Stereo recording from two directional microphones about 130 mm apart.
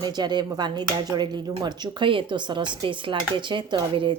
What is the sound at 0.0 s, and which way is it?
A woman's voice, 35° right (ahead or behind).